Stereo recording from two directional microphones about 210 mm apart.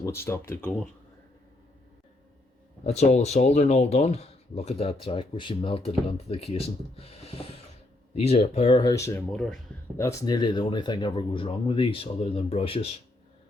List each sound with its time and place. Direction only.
0.0 s speech: 10° left (ahead or behind)
2.8 s speech: 30° left (ahead or behind); by 9.2 s 15° left (ahead or behind)
9.3 s speech: centre (ahead or behind)
10.0 s speech: 15° left (ahead or behind)